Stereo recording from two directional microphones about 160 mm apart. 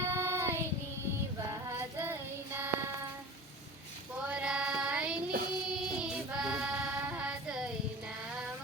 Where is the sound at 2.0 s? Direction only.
15° right (ahead or behind).